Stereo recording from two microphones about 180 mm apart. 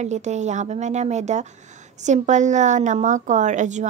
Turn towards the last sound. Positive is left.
turn(degrees=-40)  # may be behind; listen again after turning